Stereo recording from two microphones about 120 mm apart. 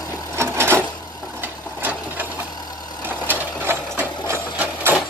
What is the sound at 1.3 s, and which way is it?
Sewing machine, 15° right (ahead or behind).